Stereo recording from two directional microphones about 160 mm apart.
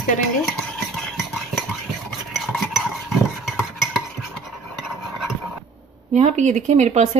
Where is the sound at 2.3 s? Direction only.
Centre (ahead or behind).